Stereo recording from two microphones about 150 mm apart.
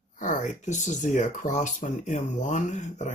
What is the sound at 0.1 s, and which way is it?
Speech, 55° left (ahead or behind).